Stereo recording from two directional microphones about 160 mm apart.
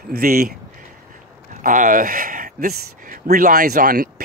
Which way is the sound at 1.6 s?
55° right (ahead or behind).